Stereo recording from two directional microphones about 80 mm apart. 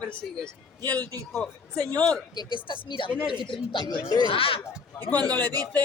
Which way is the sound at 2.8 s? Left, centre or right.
Left.